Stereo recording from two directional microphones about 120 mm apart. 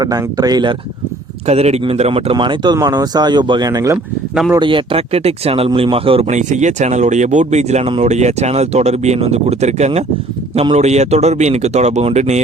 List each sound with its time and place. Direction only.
0.0 s speech: 30° right (ahead or behind)
1.5 s speech: 65° right (ahead or behind)
2.3 s speech: 40° right (ahead or behind)
3.9 s speech: 5° right (ahead or behind)
4.6 s speech: 45° right (ahead or behind)
6.3 s speech: 85° right; by 12.4 s 65° right (ahead or behind)